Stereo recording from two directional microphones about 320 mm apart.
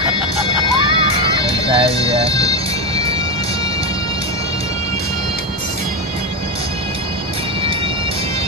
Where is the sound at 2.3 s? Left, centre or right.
Centre.